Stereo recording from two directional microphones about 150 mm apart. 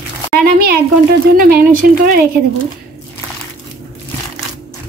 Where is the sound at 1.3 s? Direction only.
70° right (ahead or behind).